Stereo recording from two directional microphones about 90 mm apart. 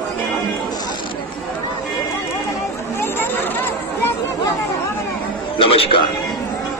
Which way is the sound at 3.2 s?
25° left (ahead or behind).